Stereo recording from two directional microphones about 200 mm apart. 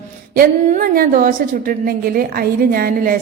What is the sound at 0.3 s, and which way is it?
A woman's voice, 45° right (ahead or behind).